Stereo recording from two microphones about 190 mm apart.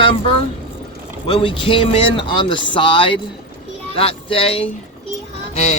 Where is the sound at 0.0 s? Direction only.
30° left (ahead or behind).